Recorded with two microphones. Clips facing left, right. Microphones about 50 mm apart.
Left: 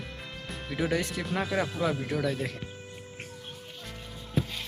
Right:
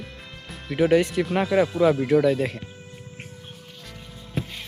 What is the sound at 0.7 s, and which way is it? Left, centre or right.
Speech, right.